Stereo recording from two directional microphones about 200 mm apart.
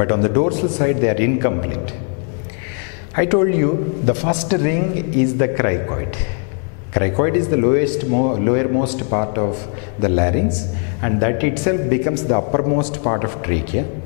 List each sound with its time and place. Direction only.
0.0 s speech: 5° left (ahead or behind)
3.2 s a man's voice: 5° left (ahead or behind)
7.0 s a man's voice: 5° left (ahead or behind)